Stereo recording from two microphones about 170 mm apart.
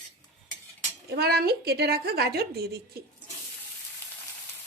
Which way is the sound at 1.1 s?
70° right (ahead or behind).